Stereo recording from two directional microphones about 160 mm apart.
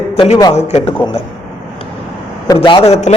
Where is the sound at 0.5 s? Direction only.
40° left (ahead or behind).